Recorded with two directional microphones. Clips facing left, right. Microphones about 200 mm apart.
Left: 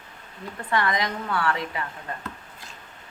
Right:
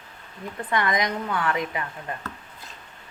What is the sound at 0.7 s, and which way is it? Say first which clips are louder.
A woman's voice: right 1 dB; 20° right (ahead or behind).